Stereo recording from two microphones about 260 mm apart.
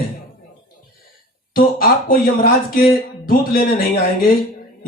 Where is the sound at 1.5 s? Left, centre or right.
Left.